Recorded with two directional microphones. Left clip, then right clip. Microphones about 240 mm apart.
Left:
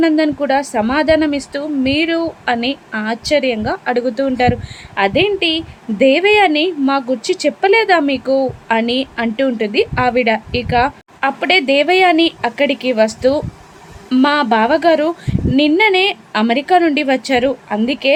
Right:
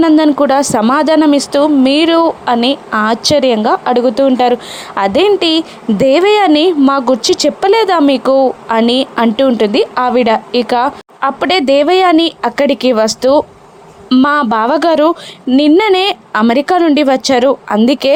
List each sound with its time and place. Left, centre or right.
0.0 s a woman's voice: right